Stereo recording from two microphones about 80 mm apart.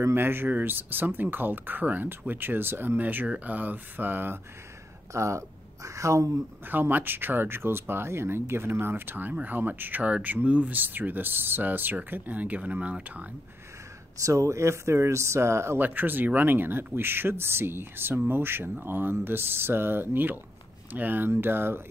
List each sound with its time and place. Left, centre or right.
0.0 s speech: right
5.1 s speech: right
6.7 s speech: right
14.2 s speech: right